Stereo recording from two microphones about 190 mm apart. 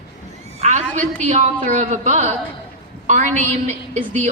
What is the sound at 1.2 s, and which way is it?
A woman's voice, 40° right (ahead or behind).